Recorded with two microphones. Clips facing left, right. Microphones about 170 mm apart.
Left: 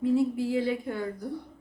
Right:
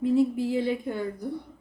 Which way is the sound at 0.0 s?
20° right (ahead or behind).